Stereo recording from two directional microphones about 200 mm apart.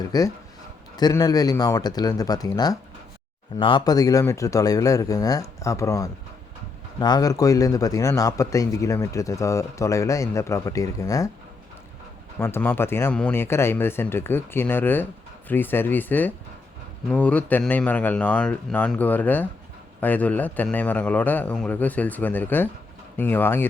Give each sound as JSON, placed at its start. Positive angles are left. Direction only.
{"t": 0.1, "sound": "a man's voice", "side_deg": 20}
{"t": 12.4, "sound": "a man's voice", "side_deg": 10}